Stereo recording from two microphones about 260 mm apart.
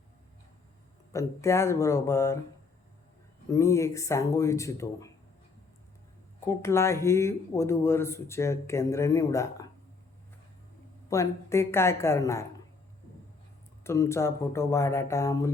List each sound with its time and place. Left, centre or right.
1.1 s speech: centre
3.5 s speech: centre
6.4 s speech: centre
11.1 s speech: centre
13.8 s speech: centre